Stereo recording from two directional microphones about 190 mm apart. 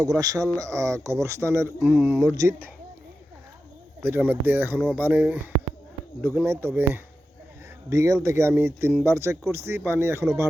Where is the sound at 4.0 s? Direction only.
10° right (ahead or behind).